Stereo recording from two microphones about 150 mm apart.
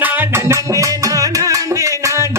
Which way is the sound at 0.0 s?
10° right (ahead or behind).